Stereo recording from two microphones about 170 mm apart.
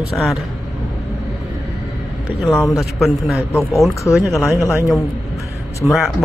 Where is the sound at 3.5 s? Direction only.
15° left (ahead or behind).